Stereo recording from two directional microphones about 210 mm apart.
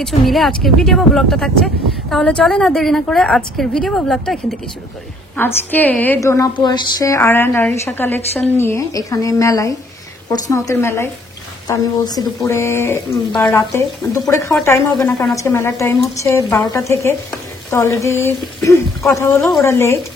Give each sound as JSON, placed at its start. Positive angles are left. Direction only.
{"t": 0.0, "sound": "speech", "side_deg": 0}